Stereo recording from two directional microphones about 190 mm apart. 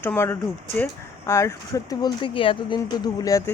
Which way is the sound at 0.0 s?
10° left (ahead or behind).